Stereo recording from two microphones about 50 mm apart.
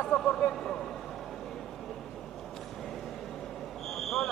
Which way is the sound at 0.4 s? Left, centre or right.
Centre.